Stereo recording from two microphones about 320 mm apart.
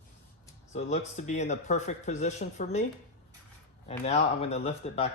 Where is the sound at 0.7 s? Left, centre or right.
Left.